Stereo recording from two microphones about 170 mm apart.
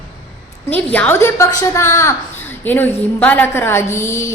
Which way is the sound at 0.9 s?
10° left (ahead or behind).